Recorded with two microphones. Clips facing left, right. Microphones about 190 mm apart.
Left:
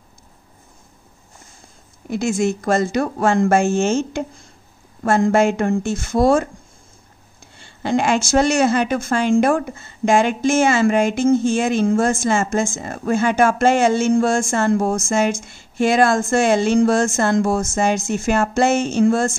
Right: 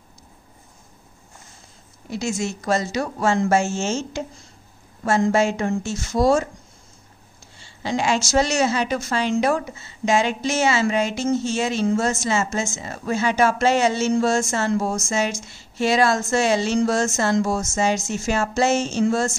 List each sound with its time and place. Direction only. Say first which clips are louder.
2.0 s speech: left 6 dB; 55° left (ahead or behind)
7.5 s a woman's voice: left 5 dB; 55° left (ahead or behind)